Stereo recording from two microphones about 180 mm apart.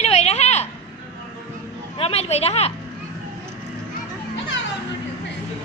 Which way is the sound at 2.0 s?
35° left (ahead or behind).